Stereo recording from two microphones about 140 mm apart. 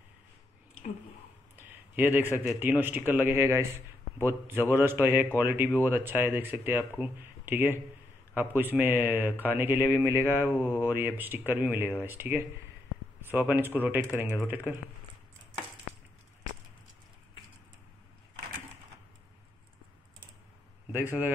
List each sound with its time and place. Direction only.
1.6 s a sound: 15° right (ahead or behind)
2.4 s a man's voice: 15° right (ahead or behind)
13.6 s a man's voice: 15° right (ahead or behind)
20.9 s a man's voice: 15° right (ahead or behind)